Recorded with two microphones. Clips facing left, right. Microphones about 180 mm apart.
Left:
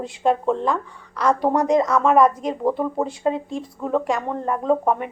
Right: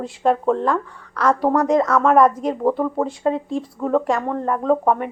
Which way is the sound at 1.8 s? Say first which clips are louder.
Right 1 dB; 10° left (ahead or behind).